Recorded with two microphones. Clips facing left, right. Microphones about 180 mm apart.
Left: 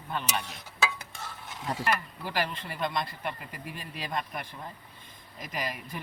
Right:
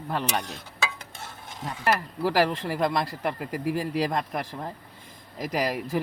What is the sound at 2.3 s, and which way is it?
Speech, 80° right.